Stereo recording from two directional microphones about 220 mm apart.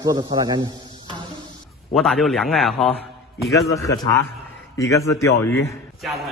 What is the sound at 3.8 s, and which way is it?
A man's voice, 15° left (ahead or behind).